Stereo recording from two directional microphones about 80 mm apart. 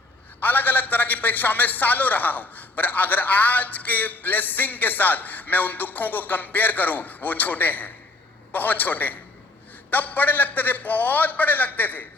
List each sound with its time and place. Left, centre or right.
0.3 s a man's voice: left